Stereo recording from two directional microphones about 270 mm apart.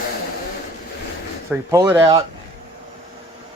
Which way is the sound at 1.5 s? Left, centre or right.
Centre.